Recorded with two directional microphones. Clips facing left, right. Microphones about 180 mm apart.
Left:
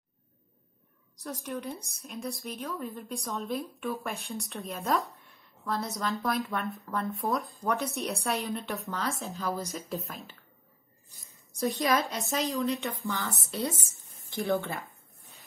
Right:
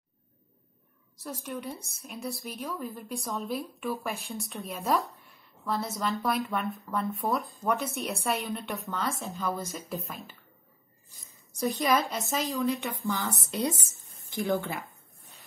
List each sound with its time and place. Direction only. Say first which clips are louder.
1.1 s a woman's voice: left 1 dB; centre (ahead or behind)
11.9 s a woman's voice: right 1 dB; centre (ahead or behind)
13.0 s speech: right 3 dB; 20° right (ahead or behind)
14.5 s a woman's voice: even; centre (ahead or behind)